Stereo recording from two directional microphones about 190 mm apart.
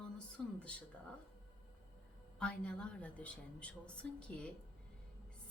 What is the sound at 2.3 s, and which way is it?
A woman's voice, 5° left (ahead or behind).